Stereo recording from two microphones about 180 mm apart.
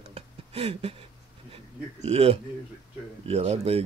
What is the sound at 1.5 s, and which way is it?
Speech, 35° right (ahead or behind).